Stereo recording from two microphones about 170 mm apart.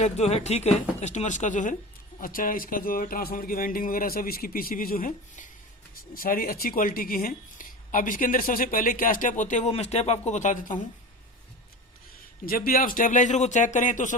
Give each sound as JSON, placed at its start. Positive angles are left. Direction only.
{"t": 0.0, "sound": "speech", "side_deg": 40}
{"t": 12.5, "sound": "speech", "side_deg": 60}